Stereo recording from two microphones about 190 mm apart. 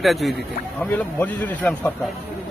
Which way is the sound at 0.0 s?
Centre (ahead or behind).